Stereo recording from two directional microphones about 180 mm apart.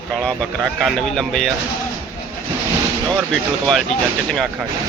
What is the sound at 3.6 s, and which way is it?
Speech, centre (ahead or behind).